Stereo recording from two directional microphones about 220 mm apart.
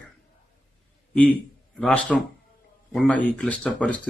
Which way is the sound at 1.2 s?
5° left (ahead or behind).